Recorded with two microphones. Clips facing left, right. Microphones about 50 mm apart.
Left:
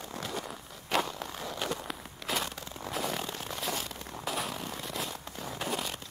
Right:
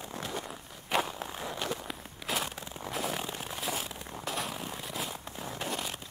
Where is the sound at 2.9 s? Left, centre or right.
Centre.